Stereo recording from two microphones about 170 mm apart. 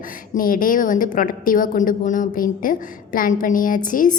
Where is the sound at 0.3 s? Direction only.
55° left (ahead or behind).